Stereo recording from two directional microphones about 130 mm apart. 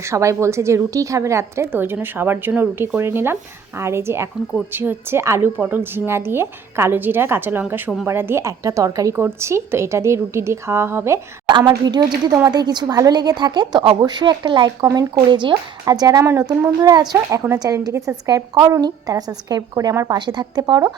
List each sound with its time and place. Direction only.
0.0 s a woman's voice: 20° right (ahead or behind)
11.4 s a sound: 35° right (ahead or behind)
11.7 s a woman's voice: 30° right (ahead or behind)